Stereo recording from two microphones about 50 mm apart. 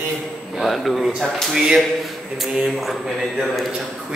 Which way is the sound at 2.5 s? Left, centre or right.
Centre.